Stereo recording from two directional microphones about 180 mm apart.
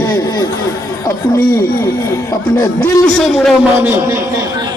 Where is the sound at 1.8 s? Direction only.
15° left (ahead or behind).